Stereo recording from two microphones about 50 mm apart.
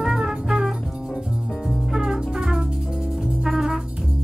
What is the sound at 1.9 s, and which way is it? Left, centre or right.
Music, centre.